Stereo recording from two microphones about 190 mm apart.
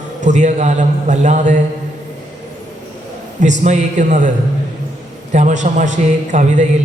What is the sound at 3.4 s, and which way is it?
Speech, 40° right (ahead or behind).